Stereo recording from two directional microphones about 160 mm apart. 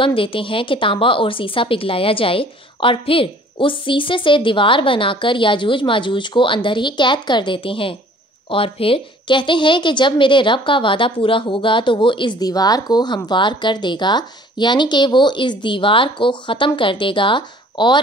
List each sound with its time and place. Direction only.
0.0 s a woman's voice: 35° left (ahead or behind)